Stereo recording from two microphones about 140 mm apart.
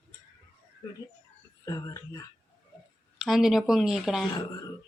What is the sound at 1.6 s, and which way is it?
Speech, 25° left (ahead or behind).